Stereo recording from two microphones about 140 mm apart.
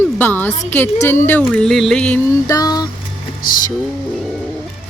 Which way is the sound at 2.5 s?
25° left (ahead or behind).